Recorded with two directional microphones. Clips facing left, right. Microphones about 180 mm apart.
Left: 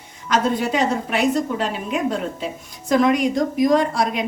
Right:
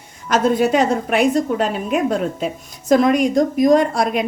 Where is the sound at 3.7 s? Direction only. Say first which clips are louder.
Right 3 dB; 50° right (ahead or behind).